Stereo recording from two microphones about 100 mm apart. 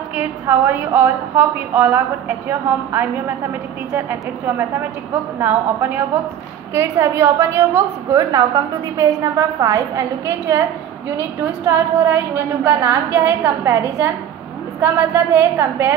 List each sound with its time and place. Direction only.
0.1 s a woman's voice: 20° right (ahead or behind); by 10.0 s 35° right (ahead or behind)
11.6 s a woman's voice: 25° right (ahead or behind)